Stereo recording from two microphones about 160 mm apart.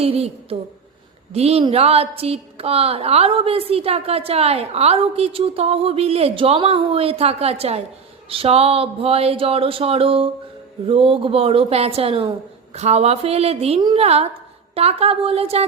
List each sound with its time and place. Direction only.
0.0 s a woman's voice: 40° right (ahead or behind)